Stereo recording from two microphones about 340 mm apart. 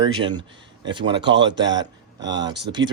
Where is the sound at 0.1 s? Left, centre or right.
Centre.